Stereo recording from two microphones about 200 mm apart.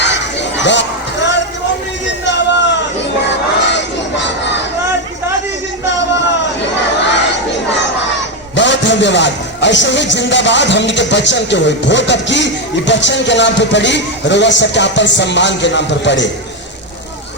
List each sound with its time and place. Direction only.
0.0 s a sound: 60° left (ahead or behind)
3.7 s crowd: 60° left (ahead or behind)
8.5 s a man's voice: 65° left (ahead or behind)